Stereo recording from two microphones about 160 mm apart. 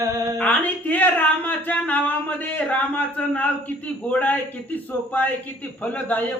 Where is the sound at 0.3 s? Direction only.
10° left (ahead or behind).